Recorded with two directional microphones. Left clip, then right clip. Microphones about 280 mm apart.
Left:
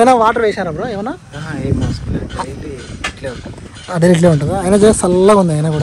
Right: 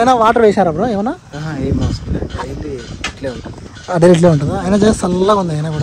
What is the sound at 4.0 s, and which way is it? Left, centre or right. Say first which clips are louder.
Speech: right 2 dB; centre.